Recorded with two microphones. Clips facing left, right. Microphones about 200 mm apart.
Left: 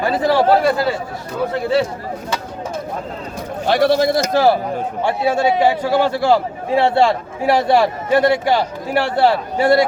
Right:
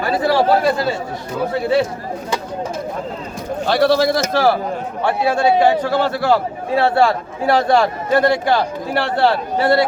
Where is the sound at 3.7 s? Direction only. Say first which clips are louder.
Even; 15° left (ahead or behind).